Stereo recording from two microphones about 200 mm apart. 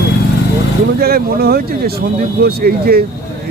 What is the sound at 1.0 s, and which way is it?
Speech, 50° right (ahead or behind).